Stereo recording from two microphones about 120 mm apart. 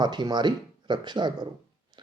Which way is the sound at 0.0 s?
35° right (ahead or behind).